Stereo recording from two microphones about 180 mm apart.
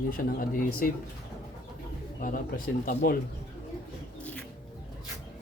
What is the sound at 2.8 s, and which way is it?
Speech, 50° left (ahead or behind).